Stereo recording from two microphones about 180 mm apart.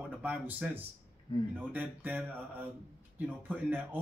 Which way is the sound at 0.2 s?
10° right (ahead or behind).